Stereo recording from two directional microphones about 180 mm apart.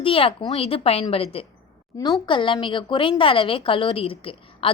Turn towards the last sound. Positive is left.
turn(degrees=30)  # may be behind; listen again after turning